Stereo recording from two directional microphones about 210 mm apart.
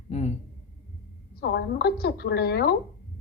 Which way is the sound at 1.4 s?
50° left (ahead or behind).